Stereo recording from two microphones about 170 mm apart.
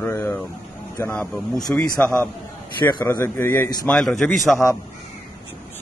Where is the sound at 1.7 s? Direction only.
5° left (ahead or behind).